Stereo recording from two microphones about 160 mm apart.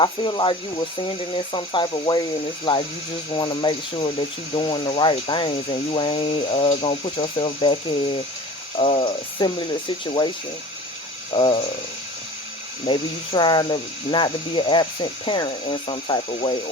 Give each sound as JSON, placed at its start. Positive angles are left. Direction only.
{"t": 0.0, "sound": "speech", "side_deg": 30}
{"t": 3.3, "sound": "speech", "side_deg": 30}
{"t": 11.3, "sound": "speech", "side_deg": 35}
{"t": 12.8, "sound": "speech", "side_deg": 30}